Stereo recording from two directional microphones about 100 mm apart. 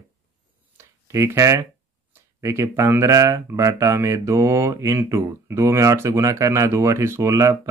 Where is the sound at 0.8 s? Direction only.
30° right (ahead or behind).